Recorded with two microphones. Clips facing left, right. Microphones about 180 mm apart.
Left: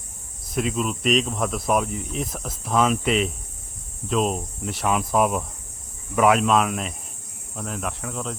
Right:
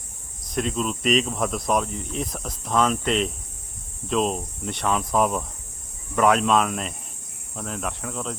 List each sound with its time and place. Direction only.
0.5 s speech: 5° left (ahead or behind)